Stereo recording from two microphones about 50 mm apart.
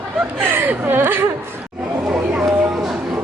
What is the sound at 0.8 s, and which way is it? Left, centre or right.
Whimper, right.